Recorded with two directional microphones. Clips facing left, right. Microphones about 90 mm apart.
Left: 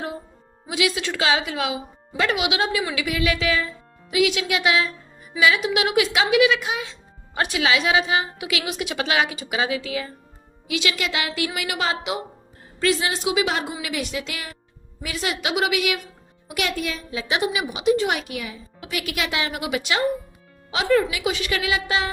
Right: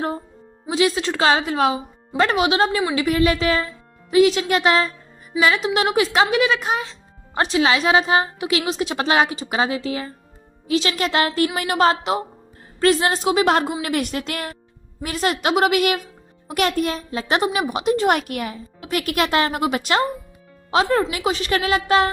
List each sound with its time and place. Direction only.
0.7 s a child's voice: 35° right (ahead or behind)